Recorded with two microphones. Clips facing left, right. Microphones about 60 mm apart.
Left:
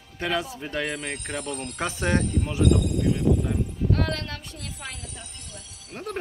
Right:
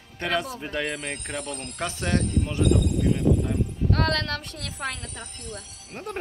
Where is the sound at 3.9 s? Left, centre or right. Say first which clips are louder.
Right 4 dB; right.